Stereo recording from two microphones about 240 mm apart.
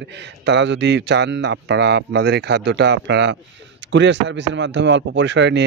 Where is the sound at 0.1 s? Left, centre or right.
Right.